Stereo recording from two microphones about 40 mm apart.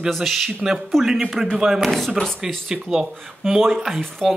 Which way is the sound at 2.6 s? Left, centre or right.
Centre.